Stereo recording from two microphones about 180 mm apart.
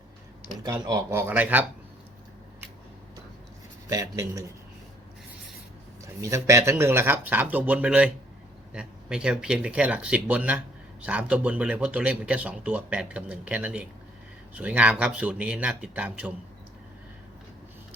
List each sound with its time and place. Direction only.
0.6 s speech: 20° right (ahead or behind)
3.8 s speech: 20° right (ahead or behind)
6.0 s speech: 15° right (ahead or behind)